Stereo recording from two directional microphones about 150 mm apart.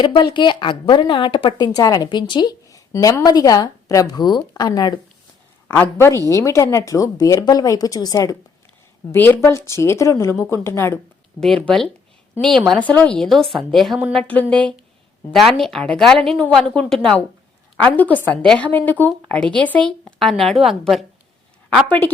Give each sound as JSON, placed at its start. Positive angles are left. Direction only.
{"t": 0.0, "sound": "a woman's voice", "side_deg": 30}
{"t": 5.6, "sound": "a woman's voice", "side_deg": 15}
{"t": 9.1, "sound": "a woman's voice", "side_deg": 10}
{"t": 11.3, "sound": "a woman's voice", "side_deg": 5}
{"t": 21.8, "sound": "a woman's voice", "side_deg": 15}